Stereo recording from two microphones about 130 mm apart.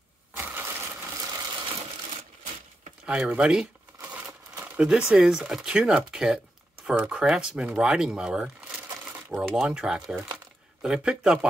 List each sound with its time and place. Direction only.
0.4 s crushing: 15° right (ahead or behind)
1.2 s a sound: 30° right (ahead or behind)
3.1 s crumpling: 10° right (ahead or behind)
4.7 s speech: 5° right (ahead or behind)